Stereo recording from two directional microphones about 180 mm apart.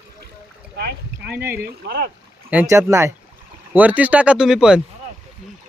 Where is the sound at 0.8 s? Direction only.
60° right (ahead or behind).